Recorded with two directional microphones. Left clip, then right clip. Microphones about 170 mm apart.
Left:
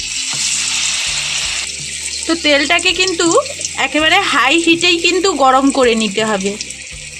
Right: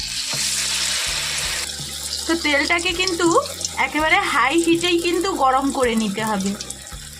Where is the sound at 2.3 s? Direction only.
30° left (ahead or behind).